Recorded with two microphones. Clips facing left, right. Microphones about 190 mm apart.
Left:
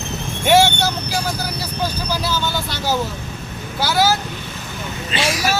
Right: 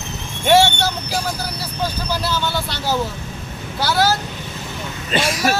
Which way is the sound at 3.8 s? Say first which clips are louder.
Even; centre (ahead or behind).